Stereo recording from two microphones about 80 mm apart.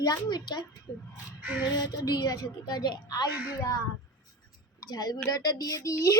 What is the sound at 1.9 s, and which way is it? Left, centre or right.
A woman's voice, left.